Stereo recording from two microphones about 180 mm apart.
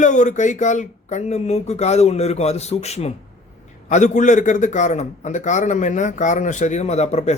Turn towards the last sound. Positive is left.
turn(degrees=35)  # may be behind; listen again after turning